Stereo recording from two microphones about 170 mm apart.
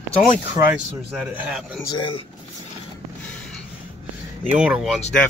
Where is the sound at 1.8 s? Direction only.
30° left (ahead or behind).